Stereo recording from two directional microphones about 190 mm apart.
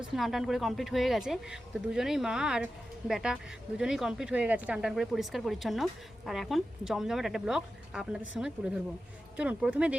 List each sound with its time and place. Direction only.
0.0 s speech: centre (ahead or behind)